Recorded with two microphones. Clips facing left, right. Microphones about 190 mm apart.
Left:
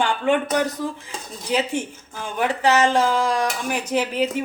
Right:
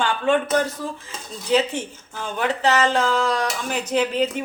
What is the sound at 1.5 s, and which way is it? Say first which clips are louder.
Speech: right 2 dB; 10° left (ahead or behind).